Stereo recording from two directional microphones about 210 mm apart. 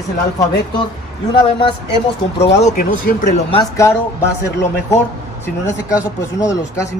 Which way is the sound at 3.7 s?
15° left (ahead or behind).